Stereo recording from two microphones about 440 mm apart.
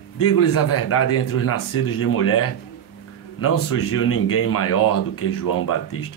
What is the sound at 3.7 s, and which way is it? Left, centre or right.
Speech, left.